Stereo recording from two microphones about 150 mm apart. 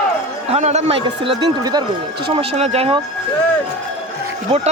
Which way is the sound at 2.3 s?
45° right (ahead or behind).